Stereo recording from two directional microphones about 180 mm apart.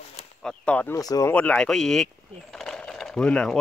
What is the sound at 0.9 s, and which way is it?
Speech, 20° left (ahead or behind).